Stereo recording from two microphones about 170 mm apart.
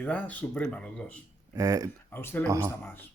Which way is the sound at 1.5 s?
20° right (ahead or behind).